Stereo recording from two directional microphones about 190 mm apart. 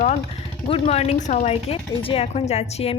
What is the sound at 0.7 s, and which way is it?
A woman's voice, 35° left (ahead or behind).